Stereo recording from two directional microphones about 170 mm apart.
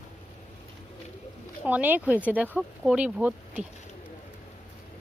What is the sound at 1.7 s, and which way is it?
Speech, 10° right (ahead or behind).